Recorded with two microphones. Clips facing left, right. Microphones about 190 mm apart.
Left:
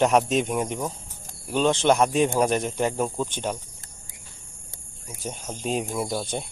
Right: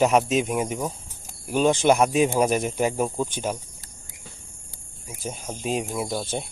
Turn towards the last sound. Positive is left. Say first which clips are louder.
# even
turn(degrees=0)  # may be behind; listen again after turning